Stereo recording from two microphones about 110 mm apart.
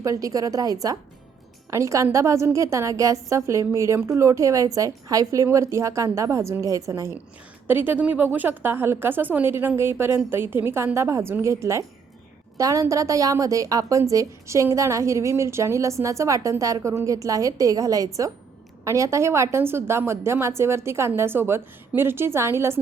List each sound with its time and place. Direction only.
0.0 s a woman's voice: 30° right (ahead or behind)